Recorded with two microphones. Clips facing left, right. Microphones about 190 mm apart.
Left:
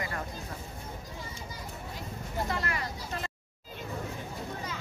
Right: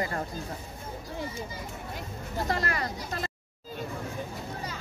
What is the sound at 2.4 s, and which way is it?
Speech, 40° right (ahead or behind).